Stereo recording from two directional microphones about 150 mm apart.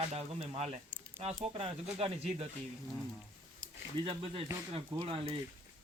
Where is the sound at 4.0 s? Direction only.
40° right (ahead or behind).